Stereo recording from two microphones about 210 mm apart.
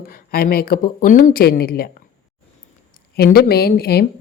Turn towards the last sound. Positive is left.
turn(degrees=45)  # may be behind; listen again after turning